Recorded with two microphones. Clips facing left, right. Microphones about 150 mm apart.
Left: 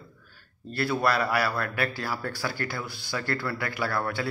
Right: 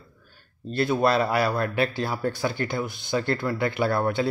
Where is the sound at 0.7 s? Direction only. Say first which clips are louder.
Right 4 dB; 20° right (ahead or behind).